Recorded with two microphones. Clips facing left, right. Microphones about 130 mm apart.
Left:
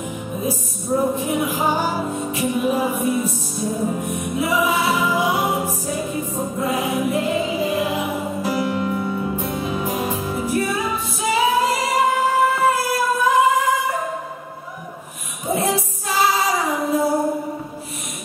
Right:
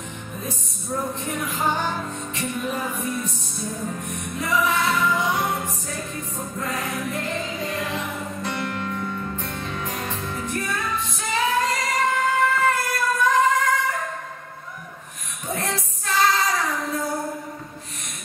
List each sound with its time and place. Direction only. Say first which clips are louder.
1.1 s music: left 7 dB; 10° left (ahead or behind)
3.7 s music: left 8 dB; 25° left (ahead or behind)
4.0 s music: left 7 dB; 5° left (ahead or behind)
15.4 s clapping: left 7 dB; 5° left (ahead or behind)
17.0 s music: left 8 dB; 25° left (ahead or behind)